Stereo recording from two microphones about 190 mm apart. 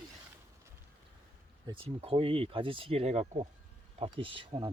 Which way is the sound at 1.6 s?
30° right (ahead or behind).